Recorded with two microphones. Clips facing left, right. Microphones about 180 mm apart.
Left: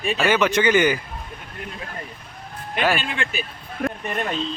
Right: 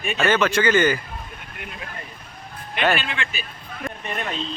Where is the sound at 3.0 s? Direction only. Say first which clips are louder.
Left 2 dB; 50° left (ahead or behind).